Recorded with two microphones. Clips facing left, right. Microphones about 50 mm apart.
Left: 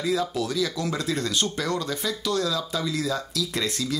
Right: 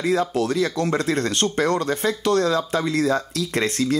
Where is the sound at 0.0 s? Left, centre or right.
Right.